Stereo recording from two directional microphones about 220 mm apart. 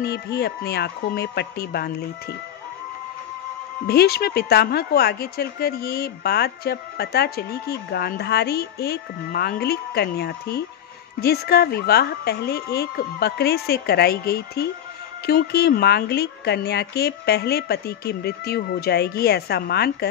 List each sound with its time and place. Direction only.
0.0 s a woman's voice: 50° left (ahead or behind)
3.8 s a woman's voice: 45° left (ahead or behind)